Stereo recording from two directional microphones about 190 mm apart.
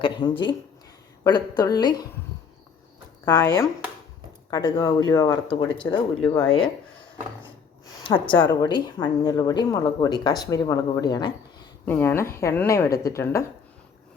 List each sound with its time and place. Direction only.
0.0 s speech: 25° left (ahead or behind)
3.2 s a woman's voice: 15° left (ahead or behind)
6.3 s speech: 5° left (ahead or behind)
7.9 s a sound: 20° left (ahead or behind)
8.3 s a woman's voice: 10° left (ahead or behind)
8.7 s speech: 20° left (ahead or behind)
11.9 s a woman's voice: 10° left (ahead or behind)